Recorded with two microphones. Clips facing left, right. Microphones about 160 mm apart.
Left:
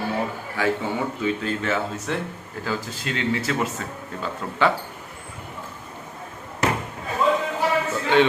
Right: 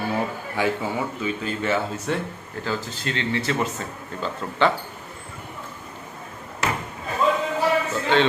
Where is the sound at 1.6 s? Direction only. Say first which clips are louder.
Right 5 dB; centre (ahead or behind).